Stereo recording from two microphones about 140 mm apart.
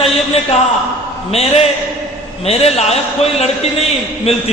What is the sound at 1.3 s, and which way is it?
A man's voice, 45° left (ahead or behind).